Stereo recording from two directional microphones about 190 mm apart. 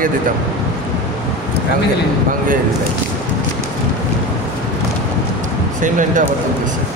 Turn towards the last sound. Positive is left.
turn(degrees=-40)  # may be behind; listen again after turning